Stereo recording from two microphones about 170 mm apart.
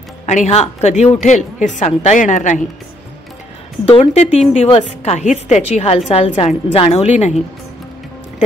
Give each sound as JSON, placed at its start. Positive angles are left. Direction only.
{"t": 0.3, "sound": "a woman's voice", "side_deg": 40}
{"t": 3.8, "sound": "a woman's voice", "side_deg": 35}